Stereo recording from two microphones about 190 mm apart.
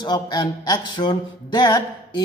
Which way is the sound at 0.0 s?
20° left (ahead or behind).